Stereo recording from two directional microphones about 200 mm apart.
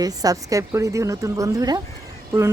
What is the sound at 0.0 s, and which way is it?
Speech, 20° right (ahead or behind).